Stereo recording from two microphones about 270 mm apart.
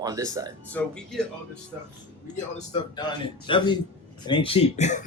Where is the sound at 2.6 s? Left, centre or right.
Centre.